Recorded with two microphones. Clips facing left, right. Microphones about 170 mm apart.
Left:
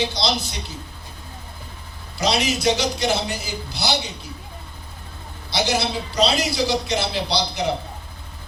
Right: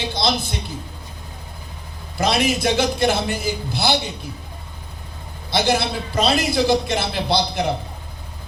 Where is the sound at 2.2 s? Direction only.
55° right (ahead or behind).